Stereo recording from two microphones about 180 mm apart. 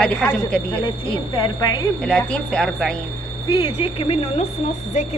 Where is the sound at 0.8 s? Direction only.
25° left (ahead or behind).